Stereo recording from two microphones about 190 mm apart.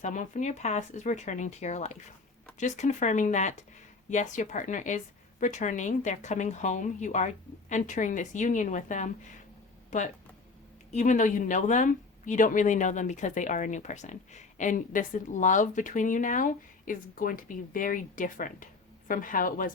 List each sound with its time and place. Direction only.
0.0 s a woman's voice: 40° left (ahead or behind)